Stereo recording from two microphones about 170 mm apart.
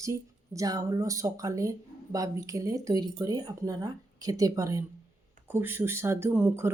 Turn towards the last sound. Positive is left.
turn(degrees=-15)  # may be behind; listen again after turning